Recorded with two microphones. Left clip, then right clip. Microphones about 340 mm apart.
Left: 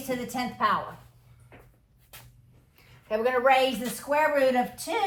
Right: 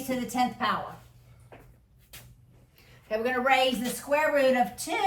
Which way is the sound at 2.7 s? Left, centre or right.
Centre.